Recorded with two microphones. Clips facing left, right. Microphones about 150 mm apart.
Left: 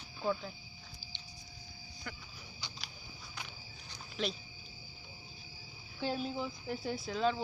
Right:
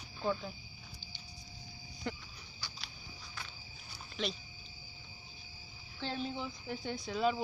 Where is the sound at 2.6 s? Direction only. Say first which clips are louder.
Even; 20° left (ahead or behind).